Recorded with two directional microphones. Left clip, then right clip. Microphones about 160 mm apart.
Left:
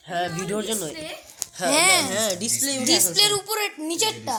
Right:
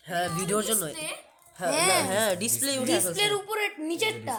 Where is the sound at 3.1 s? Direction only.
25° left (ahead or behind).